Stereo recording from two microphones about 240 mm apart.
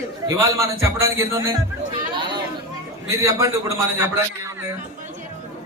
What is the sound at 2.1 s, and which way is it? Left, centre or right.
Chatter, centre.